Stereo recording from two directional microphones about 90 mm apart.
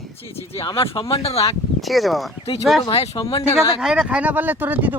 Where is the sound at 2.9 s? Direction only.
90° left.